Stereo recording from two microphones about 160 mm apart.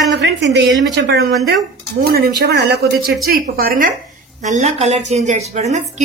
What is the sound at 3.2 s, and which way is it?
Speech, 65° right (ahead or behind).